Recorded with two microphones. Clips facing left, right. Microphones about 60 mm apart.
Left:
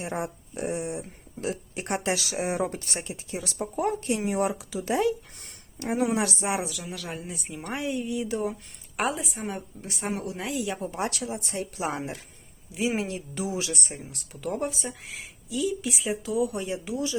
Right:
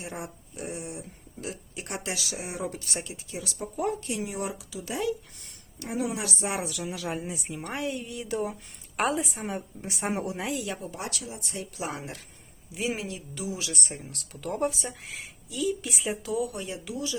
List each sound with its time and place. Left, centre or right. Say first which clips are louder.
0.0 s speech: left 6 dB; left
2.1 s speech: left 7 dB; left
6.5 s speech: left 2 dB; centre
9.8 s speech: right 1 dB; centre
10.3 s speech: left 1 dB; centre
10.9 s speech: left 6 dB; left
11.2 s speech: left 7 dB; left
11.5 s speech: left 2 dB; left
13.0 s speech: left 5 dB; left
13.7 s speech: even; centre
16.5 s speech: left 5 dB; centre